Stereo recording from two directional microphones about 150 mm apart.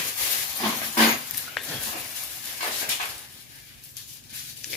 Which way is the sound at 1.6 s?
Centre (ahead or behind).